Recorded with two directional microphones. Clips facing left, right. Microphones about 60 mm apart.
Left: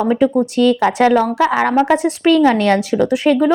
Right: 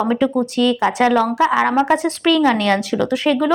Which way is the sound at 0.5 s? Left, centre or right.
Left.